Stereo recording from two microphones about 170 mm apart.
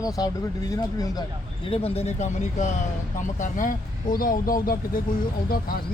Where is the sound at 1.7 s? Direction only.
35° left (ahead or behind).